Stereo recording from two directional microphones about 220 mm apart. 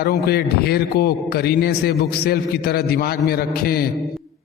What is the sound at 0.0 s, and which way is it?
A man's voice, 45° left (ahead or behind).